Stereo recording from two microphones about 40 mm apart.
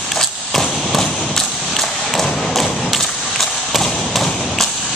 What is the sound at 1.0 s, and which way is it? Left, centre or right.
Thump, centre.